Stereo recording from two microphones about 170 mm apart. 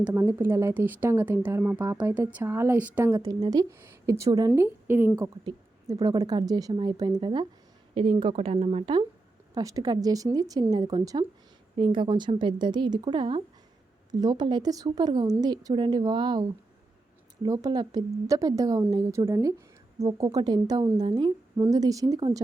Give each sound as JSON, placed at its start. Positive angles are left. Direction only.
{"t": 0.0, "sound": "a woman's voice", "side_deg": -15}
{"t": 9.6, "sound": "a woman's voice", "side_deg": -20}